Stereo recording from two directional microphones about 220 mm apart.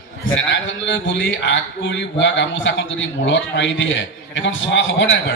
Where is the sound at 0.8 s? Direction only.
55° left (ahead or behind).